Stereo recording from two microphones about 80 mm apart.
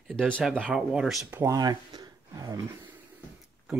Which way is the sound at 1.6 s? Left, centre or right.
Right.